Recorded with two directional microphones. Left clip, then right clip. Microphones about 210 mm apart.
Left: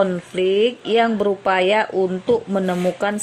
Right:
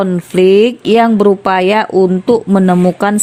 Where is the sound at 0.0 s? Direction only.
40° right (ahead or behind).